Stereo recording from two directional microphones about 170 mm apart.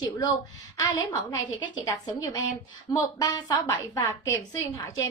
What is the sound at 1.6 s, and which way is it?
A woman's voice, 25° left (ahead or behind).